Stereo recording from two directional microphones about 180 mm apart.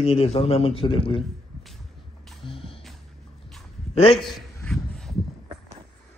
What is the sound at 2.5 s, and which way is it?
Music, 30° left (ahead or behind).